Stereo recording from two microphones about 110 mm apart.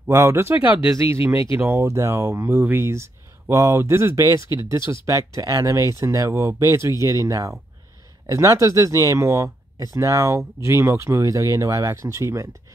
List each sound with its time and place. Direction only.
0.1 s speech: 25° right (ahead or behind)